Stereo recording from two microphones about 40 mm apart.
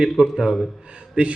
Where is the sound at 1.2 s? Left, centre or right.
Right.